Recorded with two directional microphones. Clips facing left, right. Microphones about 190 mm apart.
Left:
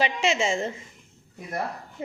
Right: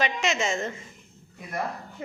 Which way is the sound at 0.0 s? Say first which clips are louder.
Left 2 dB; 30° left (ahead or behind).